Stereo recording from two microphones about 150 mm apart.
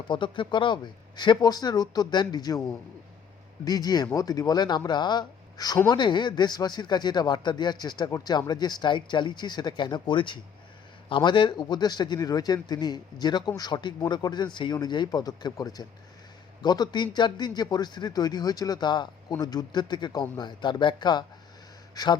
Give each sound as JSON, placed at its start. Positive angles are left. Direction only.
{"t": 0.1, "sound": "speech", "side_deg": 30}
{"t": 3.6, "sound": "speech", "side_deg": 25}